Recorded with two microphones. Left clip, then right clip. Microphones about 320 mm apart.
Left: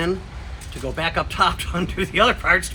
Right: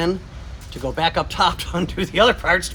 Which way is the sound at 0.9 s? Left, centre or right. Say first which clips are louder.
Right 1 dB; right.